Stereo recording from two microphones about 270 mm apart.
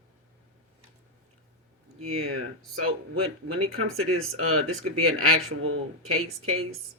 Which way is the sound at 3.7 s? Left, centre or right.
Right.